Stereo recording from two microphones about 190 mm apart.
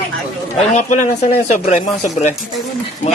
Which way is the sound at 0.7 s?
40° left (ahead or behind).